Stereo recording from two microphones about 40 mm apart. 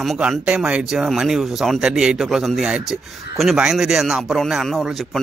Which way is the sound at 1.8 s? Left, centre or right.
Centre.